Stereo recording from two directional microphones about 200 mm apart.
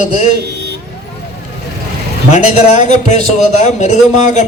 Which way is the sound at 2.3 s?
35° left (ahead or behind).